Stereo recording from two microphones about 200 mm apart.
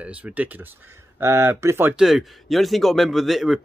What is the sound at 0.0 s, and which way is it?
Speech, 5° right (ahead or behind).